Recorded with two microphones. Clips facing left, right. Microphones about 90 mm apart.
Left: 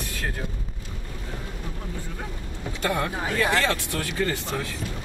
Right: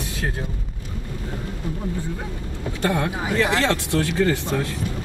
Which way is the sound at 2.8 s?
30° right (ahead or behind).